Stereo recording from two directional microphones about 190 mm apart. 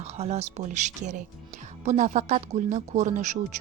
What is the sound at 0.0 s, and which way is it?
Speech, 35° right (ahead or behind).